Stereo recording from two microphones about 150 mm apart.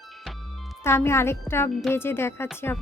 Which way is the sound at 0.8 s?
15° left (ahead or behind).